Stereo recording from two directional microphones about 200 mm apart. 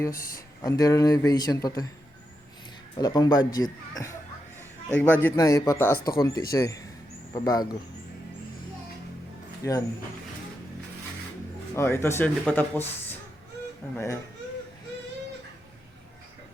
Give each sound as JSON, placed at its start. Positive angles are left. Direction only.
{"t": 0.0, "sound": "speech", "side_deg": 15}
{"t": 3.0, "sound": "speech", "side_deg": 20}
{"t": 4.9, "sound": "speech", "side_deg": 10}
{"t": 11.7, "sound": "speech", "side_deg": 10}